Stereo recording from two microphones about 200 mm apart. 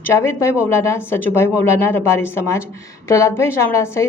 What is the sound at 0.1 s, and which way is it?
A woman's voice, 15° left (ahead or behind).